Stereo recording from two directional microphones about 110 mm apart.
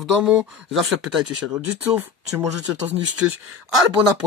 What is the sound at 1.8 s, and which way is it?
Speech, 20° right (ahead or behind).